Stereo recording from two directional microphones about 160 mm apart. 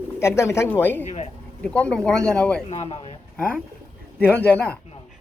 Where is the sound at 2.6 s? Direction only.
40° left (ahead or behind).